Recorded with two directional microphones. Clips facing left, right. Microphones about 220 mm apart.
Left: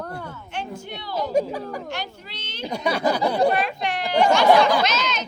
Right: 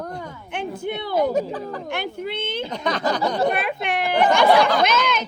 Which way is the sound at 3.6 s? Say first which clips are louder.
Right 2 dB; 55° right (ahead or behind).